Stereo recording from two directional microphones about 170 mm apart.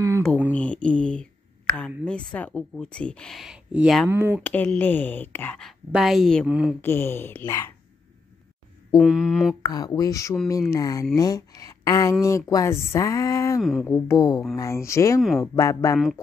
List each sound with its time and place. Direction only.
0.5 s a sound: 5° left (ahead or behind)
2.3 s speech: 10° left (ahead or behind)
4.1 s speech: 15° right (ahead or behind)
4.4 s speech: 10° left (ahead or behind); by 6.8 s 5° right (ahead or behind)
6.8 s speech: 15° left (ahead or behind)
8.9 s speech: centre (ahead or behind)
9.7 s speech: 25° left (ahead or behind)
13.6 s speech: centre (ahead or behind)
13.8 s speech: 15° left (ahead or behind)
15.1 s speech: centre (ahead or behind)
15.5 s speech: 20° left (ahead or behind)